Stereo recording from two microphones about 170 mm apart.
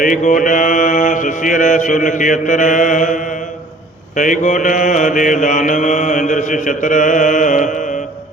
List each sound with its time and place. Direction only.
0.0 s mantra: 50° left (ahead or behind)